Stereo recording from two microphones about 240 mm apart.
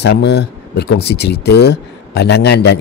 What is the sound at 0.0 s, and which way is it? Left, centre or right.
Speech, left.